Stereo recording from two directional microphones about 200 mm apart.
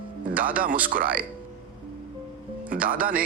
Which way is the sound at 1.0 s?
5° right (ahead or behind).